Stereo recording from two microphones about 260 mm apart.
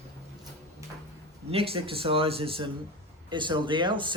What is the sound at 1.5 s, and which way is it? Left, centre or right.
Speech, right.